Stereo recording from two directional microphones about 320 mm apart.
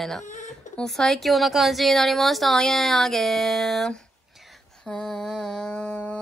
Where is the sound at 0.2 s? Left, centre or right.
Left.